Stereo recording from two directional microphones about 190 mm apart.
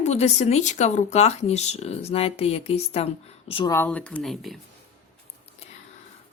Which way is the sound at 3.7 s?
10° left (ahead or behind).